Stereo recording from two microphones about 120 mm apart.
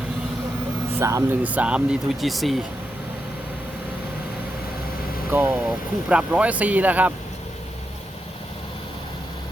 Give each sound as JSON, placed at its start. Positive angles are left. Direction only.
{"t": 0.9, "sound": "speech", "side_deg": -25}
{"t": 1.3, "sound": "speech", "side_deg": -15}
{"t": 5.3, "sound": "speech", "side_deg": -20}
{"t": 5.6, "sound": "speech", "side_deg": -10}